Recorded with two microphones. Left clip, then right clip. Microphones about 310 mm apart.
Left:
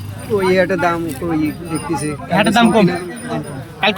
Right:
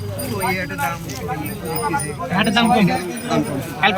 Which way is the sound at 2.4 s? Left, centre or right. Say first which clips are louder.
Left 3 dB; centre.